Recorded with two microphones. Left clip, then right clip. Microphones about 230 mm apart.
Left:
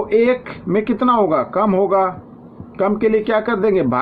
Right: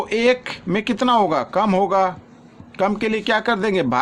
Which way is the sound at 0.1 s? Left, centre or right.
Right.